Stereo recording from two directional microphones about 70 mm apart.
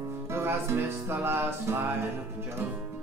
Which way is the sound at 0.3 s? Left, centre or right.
Right.